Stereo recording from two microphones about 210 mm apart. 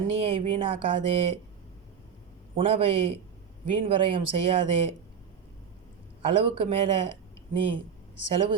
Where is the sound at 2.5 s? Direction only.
25° right (ahead or behind).